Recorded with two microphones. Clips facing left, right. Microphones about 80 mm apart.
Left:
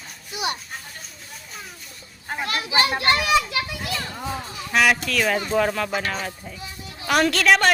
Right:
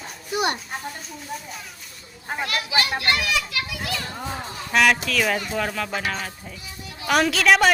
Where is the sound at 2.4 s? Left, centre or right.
Left.